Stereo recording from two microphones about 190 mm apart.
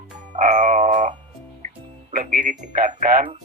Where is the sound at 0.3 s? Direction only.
40° right (ahead or behind).